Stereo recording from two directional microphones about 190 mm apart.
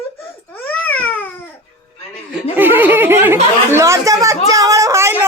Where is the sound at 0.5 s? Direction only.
10° left (ahead or behind).